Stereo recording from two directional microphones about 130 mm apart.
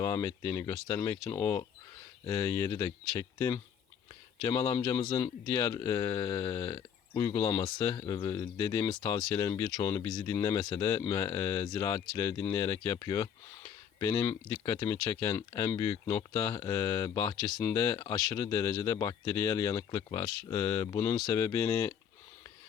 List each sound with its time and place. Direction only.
0.0 s speech: 25° left (ahead or behind)